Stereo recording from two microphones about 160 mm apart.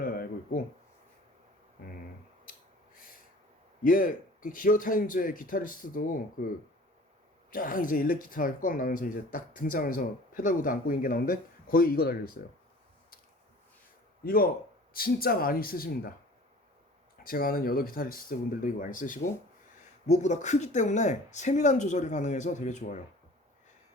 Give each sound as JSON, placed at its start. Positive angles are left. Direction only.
{"t": 0.0, "sound": "a sound", "side_deg": 65}
{"t": 2.5, "sound": "a sound", "side_deg": 60}
{"t": 3.8, "sound": "speech", "side_deg": 60}
{"t": 7.5, "sound": "speech", "side_deg": 60}
{"t": 14.3, "sound": "speech", "side_deg": 65}
{"t": 17.2, "sound": "speech", "side_deg": 65}